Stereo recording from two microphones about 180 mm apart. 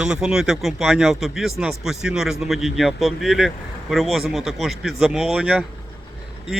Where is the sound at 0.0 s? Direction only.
5° right (ahead or behind).